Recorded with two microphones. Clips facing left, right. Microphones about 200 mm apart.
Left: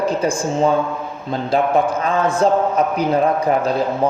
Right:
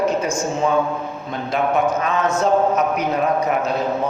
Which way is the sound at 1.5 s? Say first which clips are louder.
Left 2 dB; 30° left (ahead or behind).